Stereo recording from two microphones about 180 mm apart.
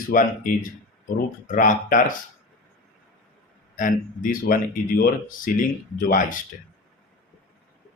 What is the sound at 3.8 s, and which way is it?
Speech, 50° left (ahead or behind).